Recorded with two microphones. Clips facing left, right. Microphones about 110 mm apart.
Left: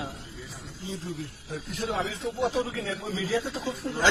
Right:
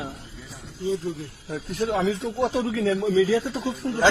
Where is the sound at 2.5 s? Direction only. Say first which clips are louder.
Right 6 dB; 85° right.